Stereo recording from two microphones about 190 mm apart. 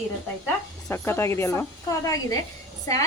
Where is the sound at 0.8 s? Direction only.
15° left (ahead or behind).